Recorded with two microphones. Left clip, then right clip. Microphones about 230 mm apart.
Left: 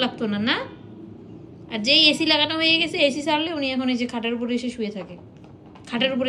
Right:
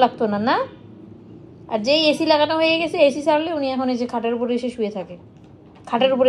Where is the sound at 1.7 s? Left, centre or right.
Right.